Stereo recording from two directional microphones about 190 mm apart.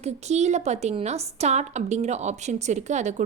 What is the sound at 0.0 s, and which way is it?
A woman's voice, 35° right (ahead or behind).